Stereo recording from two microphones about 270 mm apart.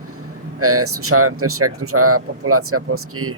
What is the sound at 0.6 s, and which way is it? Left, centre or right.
Speech, right.